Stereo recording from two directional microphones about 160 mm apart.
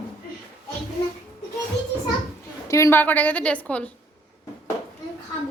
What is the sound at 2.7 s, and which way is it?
A woman's voice, 20° left (ahead or behind).